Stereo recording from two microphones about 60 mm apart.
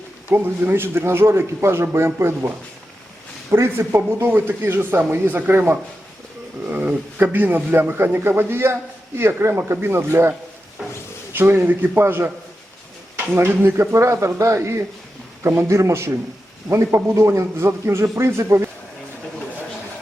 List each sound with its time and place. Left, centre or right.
0.3 s a man's voice: right
3.5 s a man's voice: right
11.3 s a man's voice: right